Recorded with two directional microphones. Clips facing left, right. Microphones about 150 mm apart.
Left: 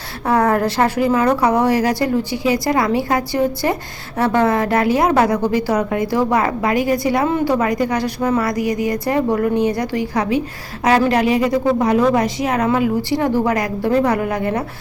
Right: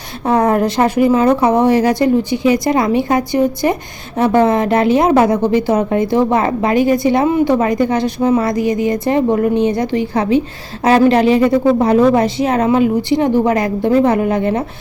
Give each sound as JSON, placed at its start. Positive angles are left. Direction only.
{"t": 0.3, "sound": "a woman's voice", "side_deg": -20}